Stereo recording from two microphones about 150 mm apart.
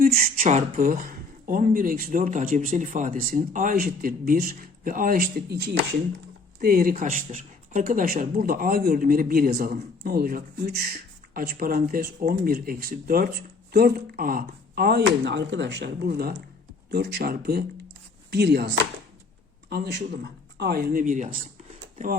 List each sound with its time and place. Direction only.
0.0 s speech: 70° right (ahead or behind); by 5.8 s 90° right
6.6 s speech: 75° right (ahead or behind)
7.0 s speech: 60° right (ahead or behind); by 10.9 s 85° right
11.3 s speech: 70° right (ahead or behind)
13.7 s speech: 90° right
16.0 s speech: 90° right; by 21.3 s 60° right (ahead or behind)